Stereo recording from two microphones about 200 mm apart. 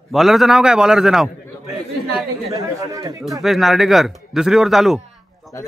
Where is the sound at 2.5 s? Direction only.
15° right (ahead or behind).